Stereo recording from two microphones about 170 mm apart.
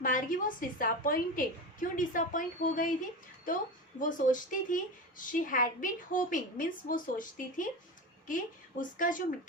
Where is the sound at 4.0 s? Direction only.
50° left (ahead or behind).